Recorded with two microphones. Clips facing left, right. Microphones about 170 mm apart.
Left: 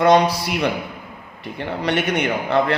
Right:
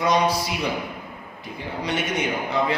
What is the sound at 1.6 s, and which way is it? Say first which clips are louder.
A man's voice: left 6 dB; 65° left (ahead or behind).